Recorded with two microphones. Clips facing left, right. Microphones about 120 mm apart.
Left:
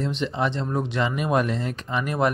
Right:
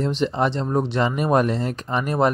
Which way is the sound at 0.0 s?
40° right (ahead or behind).